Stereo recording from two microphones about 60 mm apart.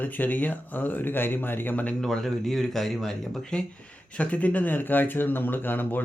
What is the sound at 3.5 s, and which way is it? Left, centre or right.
Speech, left.